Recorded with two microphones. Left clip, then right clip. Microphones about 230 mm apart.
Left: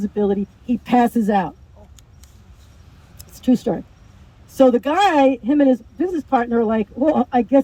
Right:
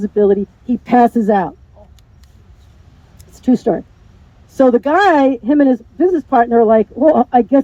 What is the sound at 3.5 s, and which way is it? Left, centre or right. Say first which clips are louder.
Speech: right 6 dB; centre.